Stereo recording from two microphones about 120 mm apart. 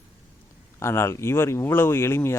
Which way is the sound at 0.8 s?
20° left (ahead or behind).